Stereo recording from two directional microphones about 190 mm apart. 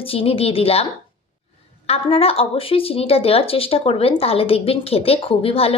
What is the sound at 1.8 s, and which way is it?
A woman's voice, 30° left (ahead or behind).